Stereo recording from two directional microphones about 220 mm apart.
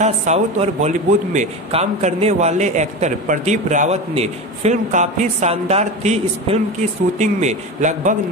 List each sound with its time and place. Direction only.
0.0 s a man's voice: 30° right (ahead or behind)